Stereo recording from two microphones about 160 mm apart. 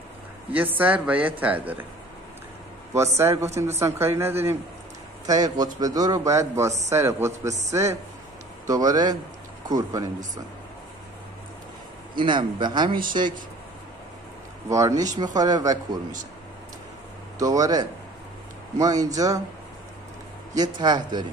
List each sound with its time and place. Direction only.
0.5 s a man's voice: 10° right (ahead or behind)
2.9 s a man's voice: 15° right (ahead or behind)
12.2 s a man's voice: 30° right (ahead or behind)
14.7 s a man's voice: 20° right (ahead or behind)
17.4 s a man's voice: 20° right (ahead or behind)
20.5 s a man's voice: 25° right (ahead or behind)